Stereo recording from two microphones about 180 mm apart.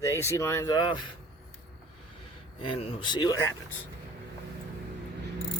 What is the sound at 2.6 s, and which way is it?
Speech, 25° left (ahead or behind).